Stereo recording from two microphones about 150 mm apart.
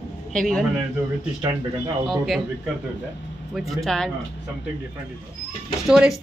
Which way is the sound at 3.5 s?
Centre (ahead or behind).